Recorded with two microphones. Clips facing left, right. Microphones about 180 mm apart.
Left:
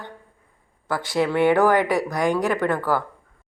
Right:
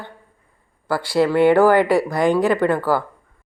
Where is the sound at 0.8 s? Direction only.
5° right (ahead or behind).